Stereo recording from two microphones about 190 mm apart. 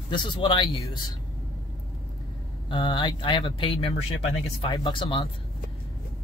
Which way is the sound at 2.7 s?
25° left (ahead or behind).